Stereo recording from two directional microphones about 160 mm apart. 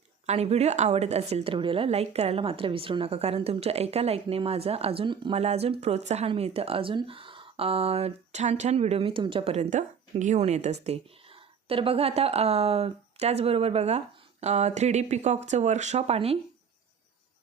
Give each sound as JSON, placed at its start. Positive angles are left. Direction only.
{"t": 0.3, "sound": "speech", "side_deg": -40}